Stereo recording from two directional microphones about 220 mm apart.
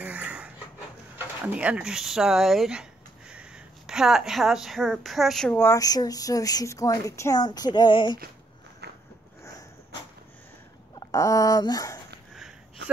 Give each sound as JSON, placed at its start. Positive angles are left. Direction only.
{"t": 0.0, "sound": "a sound", "side_deg": -5}
{"t": 1.1, "sound": "speech", "side_deg": -5}
{"t": 8.8, "sound": "biting", "side_deg": -50}
{"t": 11.0, "sound": "speech", "side_deg": 15}
{"t": 12.4, "sound": "sniff", "side_deg": 0}